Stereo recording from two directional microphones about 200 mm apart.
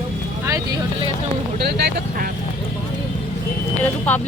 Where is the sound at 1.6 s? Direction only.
55° right (ahead or behind).